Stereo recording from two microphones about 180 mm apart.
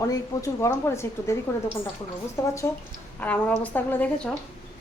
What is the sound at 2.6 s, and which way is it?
A woman's voice, 15° left (ahead or behind).